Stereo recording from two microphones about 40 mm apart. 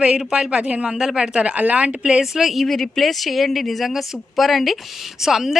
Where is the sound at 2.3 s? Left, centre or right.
Centre.